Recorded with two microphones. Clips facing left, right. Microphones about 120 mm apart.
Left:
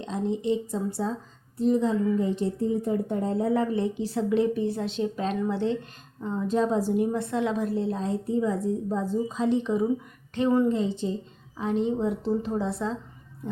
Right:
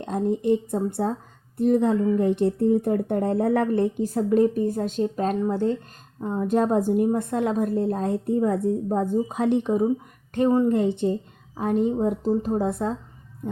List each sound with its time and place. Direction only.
0.0 s a woman's voice: 55° right (ahead or behind)
10.3 s a woman's voice: 40° right (ahead or behind)
10.7 s a woman's voice: 60° right (ahead or behind)
13.4 s heart sounds: 45° right (ahead or behind)